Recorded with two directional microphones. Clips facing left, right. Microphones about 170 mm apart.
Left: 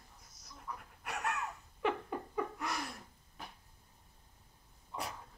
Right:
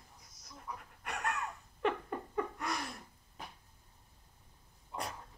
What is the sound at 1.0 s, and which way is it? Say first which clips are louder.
Breathing: even; 5° left (ahead or behind).